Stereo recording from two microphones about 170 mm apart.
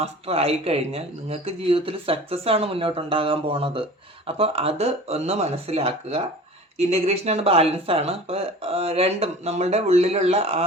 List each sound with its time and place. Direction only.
0.0 s speech: 35° right (ahead or behind)